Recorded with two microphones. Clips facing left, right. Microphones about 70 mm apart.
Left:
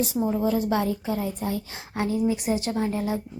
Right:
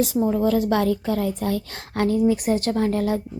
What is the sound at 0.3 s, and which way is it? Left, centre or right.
A woman's voice, right.